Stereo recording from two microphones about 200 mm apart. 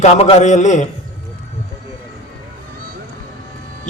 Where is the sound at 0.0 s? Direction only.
35° left (ahead or behind).